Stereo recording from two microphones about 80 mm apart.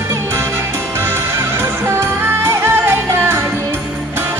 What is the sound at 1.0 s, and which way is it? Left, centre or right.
Music, right.